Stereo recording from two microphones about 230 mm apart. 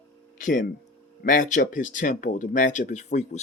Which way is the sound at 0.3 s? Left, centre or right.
Left.